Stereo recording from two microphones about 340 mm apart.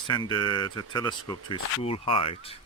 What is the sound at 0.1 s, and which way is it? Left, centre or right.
Speech, centre.